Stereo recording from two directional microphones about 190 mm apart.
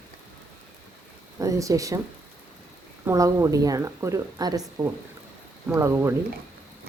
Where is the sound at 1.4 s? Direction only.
15° right (ahead or behind).